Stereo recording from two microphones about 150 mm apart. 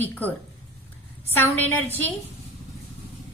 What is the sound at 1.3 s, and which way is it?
Speech, 15° left (ahead or behind).